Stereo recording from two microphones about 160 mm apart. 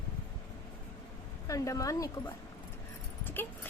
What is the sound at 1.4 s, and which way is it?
Speech, 20° left (ahead or behind).